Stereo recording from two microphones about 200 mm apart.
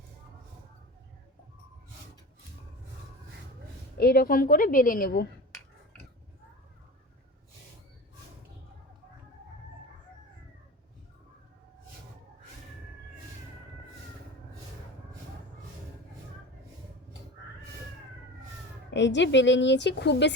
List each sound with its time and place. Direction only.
3.9 s a woman's voice: 50° left (ahead or behind)
18.9 s a woman's voice: 65° left (ahead or behind)